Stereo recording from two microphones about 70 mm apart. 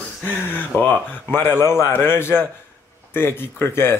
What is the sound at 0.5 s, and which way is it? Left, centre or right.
Speech, left.